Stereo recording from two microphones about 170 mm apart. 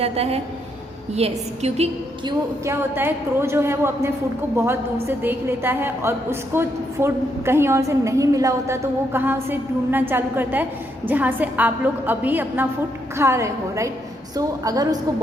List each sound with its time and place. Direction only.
0.0 s a woman's voice: 35° right (ahead or behind)
2.2 s a woman's voice: 15° right (ahead or behind)